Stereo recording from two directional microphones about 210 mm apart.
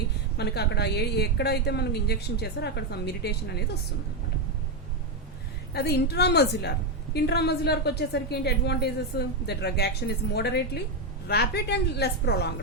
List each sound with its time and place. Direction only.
0.3 s a woman's voice: 50° left (ahead or behind)
5.7 s a woman's voice: 50° left (ahead or behind)